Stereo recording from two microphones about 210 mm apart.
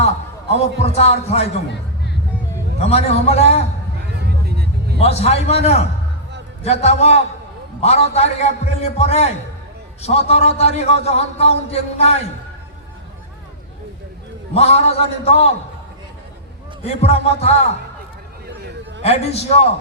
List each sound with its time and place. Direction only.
0.9 s a man's voice: 30° left (ahead or behind)
2.7 s a man's voice: 30° left (ahead or behind)
4.1 s vehicle: 50° right (ahead or behind)
4.9 s a man's voice: 30° left (ahead or behind)
14.5 s a man's voice: 30° left (ahead or behind)
16.8 s a man's voice: 30° left (ahead or behind)
18.4 s a sound: 55° right (ahead or behind)
19.0 s a man's voice: 30° left (ahead or behind)